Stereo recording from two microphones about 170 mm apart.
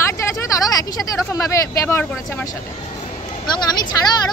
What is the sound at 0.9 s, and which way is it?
Speech, 20° left (ahead or behind).